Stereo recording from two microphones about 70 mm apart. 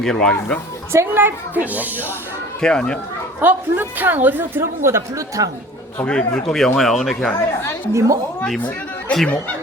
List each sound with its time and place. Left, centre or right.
0.0 s speech: centre
0.9 s a woman's voice: right
2.6 s speech: centre
3.4 s a woman's voice: right
4.6 s speech: right
6.1 s speech: centre
7.3 s speech: left
7.9 s speech: right
8.5 s speech: centre